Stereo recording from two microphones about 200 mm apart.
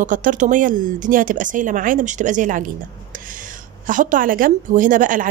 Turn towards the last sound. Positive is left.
turn(degrees=-40)  # may be behind; listen again after turning